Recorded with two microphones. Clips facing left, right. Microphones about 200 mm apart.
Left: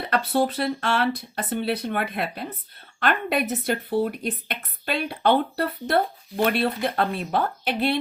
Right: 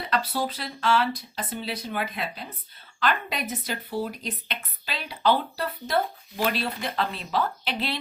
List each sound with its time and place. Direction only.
0.0 s speech: 55° left (ahead or behind)